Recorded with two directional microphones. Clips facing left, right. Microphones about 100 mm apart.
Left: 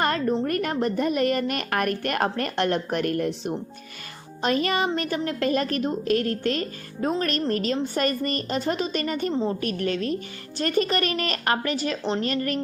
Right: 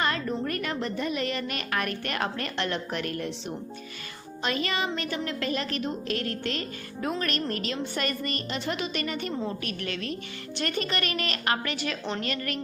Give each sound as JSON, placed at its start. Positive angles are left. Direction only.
{"t": 0.0, "sound": "a sound", "side_deg": 45}
{"t": 0.4, "sound": "a woman's voice", "side_deg": 45}
{"t": 9.3, "sound": "a woman's voice", "side_deg": 30}
{"t": 9.6, "sound": "a woman's voice", "side_deg": 40}